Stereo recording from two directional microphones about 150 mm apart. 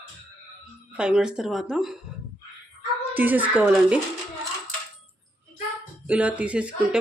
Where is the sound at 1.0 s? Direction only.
5° right (ahead or behind).